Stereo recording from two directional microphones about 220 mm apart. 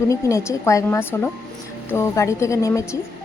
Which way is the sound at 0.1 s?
15° left (ahead or behind).